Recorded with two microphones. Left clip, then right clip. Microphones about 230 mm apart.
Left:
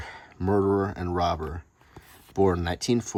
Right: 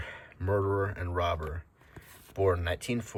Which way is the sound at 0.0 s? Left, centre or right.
Left.